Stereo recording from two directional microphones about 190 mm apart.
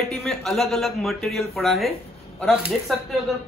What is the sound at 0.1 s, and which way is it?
A man's voice, centre (ahead or behind).